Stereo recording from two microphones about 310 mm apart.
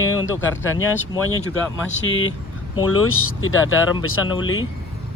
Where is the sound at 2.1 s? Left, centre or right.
Left.